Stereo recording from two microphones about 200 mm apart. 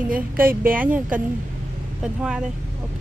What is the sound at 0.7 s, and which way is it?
Speech, 5° right (ahead or behind).